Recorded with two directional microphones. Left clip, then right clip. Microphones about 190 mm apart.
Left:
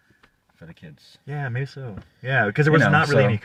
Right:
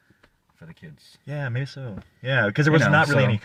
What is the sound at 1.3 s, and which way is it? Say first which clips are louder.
Speech: left 1 dB; 20° right (ahead or behind).